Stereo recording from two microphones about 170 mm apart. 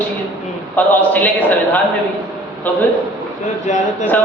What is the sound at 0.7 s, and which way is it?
Speech, 10° left (ahead or behind).